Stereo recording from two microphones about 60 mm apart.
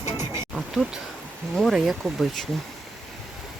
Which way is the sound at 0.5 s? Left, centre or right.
Centre.